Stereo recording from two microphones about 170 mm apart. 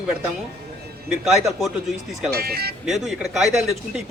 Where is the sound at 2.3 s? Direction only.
65° right (ahead or behind).